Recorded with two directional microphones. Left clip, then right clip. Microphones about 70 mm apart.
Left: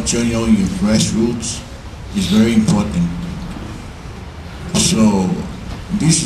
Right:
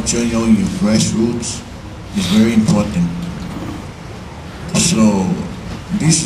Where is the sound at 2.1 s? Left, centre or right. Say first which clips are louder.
Right 1 dB; right.